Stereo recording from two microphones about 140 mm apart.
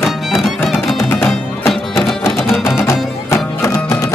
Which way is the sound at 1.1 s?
15° left (ahead or behind).